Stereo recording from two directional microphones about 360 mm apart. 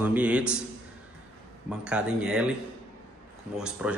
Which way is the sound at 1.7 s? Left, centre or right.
Centre.